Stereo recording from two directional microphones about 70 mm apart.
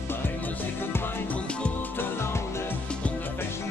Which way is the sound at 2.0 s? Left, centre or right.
Left.